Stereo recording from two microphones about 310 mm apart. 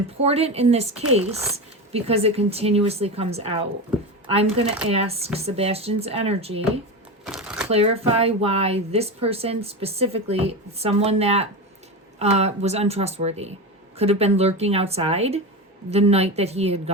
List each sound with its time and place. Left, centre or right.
0.2 s speech: centre
1.3 s speech: centre
7.3 s shuffling cards: centre
7.7 s speech: centre